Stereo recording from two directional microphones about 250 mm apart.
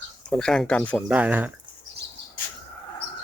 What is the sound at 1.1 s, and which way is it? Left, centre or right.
Speech, centre.